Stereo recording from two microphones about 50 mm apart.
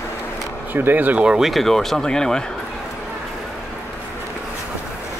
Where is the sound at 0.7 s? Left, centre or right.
Right.